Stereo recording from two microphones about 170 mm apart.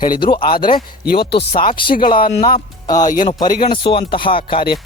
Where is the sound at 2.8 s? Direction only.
20° left (ahead or behind).